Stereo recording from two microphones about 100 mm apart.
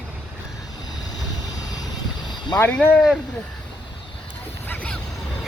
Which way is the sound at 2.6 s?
15° left (ahead or behind).